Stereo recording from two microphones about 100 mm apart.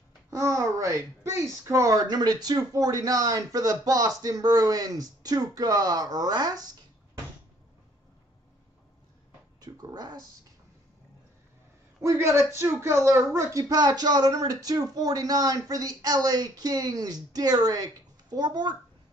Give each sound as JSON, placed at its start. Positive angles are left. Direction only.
{"t": 0.3, "sound": "a child's voice", "side_deg": -30}
{"t": 9.6, "sound": "a sound", "side_deg": -40}
{"t": 12.0, "sound": "a man's voice", "side_deg": -30}